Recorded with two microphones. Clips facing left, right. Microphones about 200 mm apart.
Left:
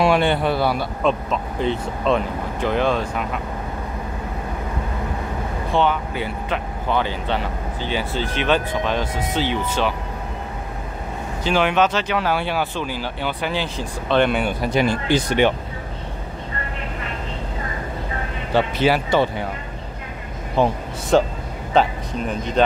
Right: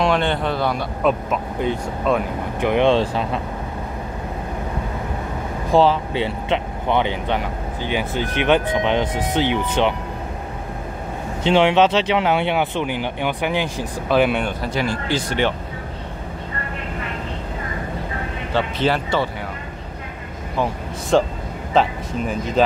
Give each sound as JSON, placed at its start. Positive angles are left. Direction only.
{"t": 0.0, "sound": "speech", "side_deg": 10}
{"t": 1.0, "sound": "speech", "side_deg": -10}
{"t": 5.7, "sound": "speech", "side_deg": -35}
{"t": 11.4, "sound": "speech", "side_deg": -25}
{"t": 14.4, "sound": "speech", "side_deg": 15}
{"t": 18.5, "sound": "speech", "side_deg": 10}
{"t": 20.6, "sound": "speech", "side_deg": 25}
{"t": 21.1, "sound": "speech", "side_deg": 0}